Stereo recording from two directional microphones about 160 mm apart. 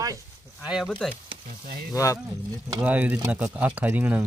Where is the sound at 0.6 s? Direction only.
5° right (ahead or behind).